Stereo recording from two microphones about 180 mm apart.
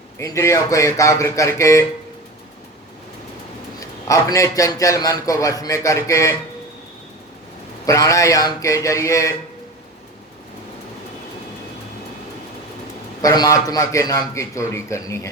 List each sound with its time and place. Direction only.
0.2 s a man's voice: 15° left (ahead or behind)
3.8 s a man's voice: 20° left (ahead or behind)
7.9 s a man's voice: 20° left (ahead or behind)
13.2 s a man's voice: 20° left (ahead or behind)